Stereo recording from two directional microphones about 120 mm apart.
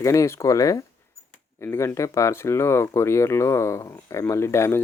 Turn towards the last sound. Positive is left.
turn(degrees=20)  # may be behind; listen again after turning